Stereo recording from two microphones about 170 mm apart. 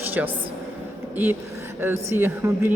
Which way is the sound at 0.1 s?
10° right (ahead or behind).